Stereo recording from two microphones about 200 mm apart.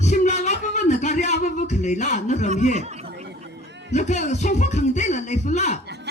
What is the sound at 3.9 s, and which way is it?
Speech, 35° left (ahead or behind).